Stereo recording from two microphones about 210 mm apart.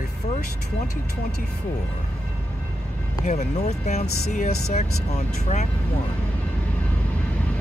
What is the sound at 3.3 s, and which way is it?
Speech, 30° left (ahead or behind).